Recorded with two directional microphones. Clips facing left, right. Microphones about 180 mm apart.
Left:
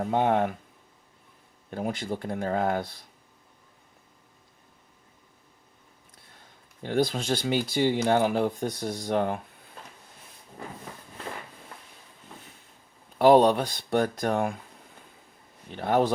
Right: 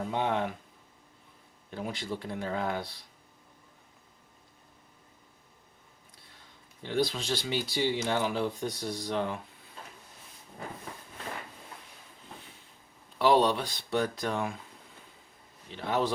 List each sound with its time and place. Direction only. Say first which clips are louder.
0.0 s speech: left 6 dB; 50° left (ahead or behind)
1.7 s speech: left 5 dB; 50° left (ahead or behind)
6.8 s speech: left 4 dB; 50° left (ahead or behind)
13.1 s speech: left 6 dB; 50° left (ahead or behind)
15.7 s speech: left 6 dB; 50° left (ahead or behind)